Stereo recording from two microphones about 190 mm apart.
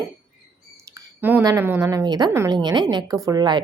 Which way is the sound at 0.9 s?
15° right (ahead or behind).